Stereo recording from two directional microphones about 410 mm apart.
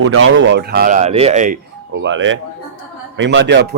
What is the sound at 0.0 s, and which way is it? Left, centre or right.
Speech, right.